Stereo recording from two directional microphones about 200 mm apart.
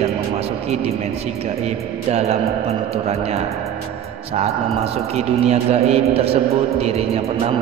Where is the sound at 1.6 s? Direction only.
30° right (ahead or behind).